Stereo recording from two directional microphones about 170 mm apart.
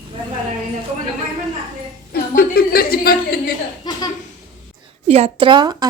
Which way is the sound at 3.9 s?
25° left (ahead or behind).